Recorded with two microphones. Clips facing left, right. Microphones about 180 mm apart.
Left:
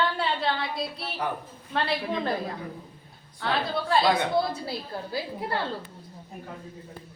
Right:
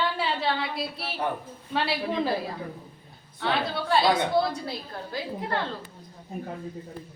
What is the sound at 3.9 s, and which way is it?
A woman's voice, centre (ahead or behind).